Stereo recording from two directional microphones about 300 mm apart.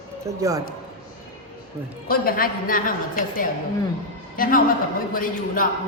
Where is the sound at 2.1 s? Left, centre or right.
Left.